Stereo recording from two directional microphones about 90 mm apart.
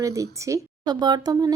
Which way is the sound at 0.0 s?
35° right (ahead or behind).